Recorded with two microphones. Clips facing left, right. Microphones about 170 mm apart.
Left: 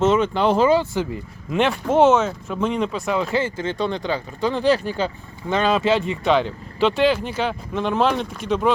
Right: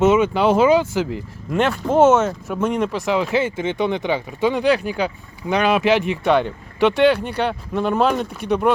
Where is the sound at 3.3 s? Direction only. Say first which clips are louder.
Right 2 dB; 20° right (ahead or behind).